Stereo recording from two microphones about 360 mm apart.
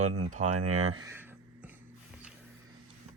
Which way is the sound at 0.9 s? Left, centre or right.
Centre.